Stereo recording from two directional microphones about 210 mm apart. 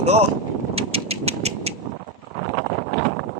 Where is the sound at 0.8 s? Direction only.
30° right (ahead or behind).